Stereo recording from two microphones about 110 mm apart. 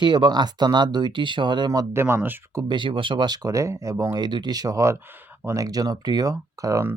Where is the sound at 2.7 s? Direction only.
50° right (ahead or behind); by 4.0 s 30° right (ahead or behind).